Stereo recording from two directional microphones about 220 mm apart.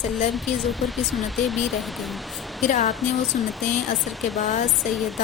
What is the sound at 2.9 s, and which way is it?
Speech, centre (ahead or behind).